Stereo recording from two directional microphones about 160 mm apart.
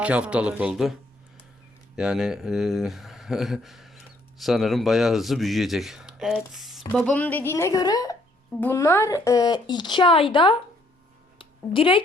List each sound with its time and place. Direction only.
0.0 s speech: 10° right (ahead or behind)
2.0 s speech: 5° right (ahead or behind)
7.0 s a woman's voice: 10° left (ahead or behind); by 10.6 s 30° left (ahead or behind)
11.3 s a sound: 35° left (ahead or behind)